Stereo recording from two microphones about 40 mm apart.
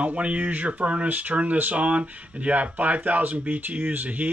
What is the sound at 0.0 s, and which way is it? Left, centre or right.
Speech, right.